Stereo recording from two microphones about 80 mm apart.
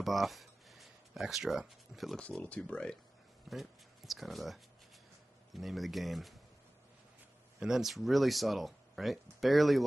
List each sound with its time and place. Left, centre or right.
0.0 s a sound: centre
2.4 s speech: centre
3.4 s speech: centre
7.6 s speech: centre